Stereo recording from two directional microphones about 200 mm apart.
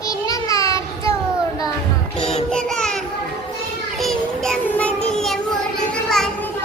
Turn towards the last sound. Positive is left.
turn(degrees=5)  # may be behind; listen again after turning